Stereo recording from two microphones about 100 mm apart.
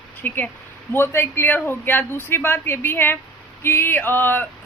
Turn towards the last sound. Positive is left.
turn(degrees=20)  # may be behind; listen again after turning